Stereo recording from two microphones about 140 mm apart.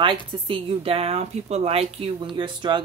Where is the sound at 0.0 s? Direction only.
40° right (ahead or behind).